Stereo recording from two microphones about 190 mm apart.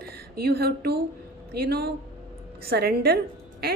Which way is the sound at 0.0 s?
55° right (ahead or behind).